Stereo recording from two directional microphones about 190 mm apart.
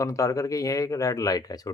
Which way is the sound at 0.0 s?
15° left (ahead or behind).